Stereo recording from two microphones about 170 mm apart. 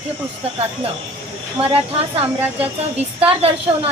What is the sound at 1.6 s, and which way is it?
Speech, 35° right (ahead or behind).